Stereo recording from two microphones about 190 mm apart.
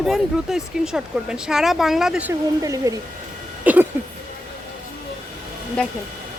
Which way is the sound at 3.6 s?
10° right (ahead or behind).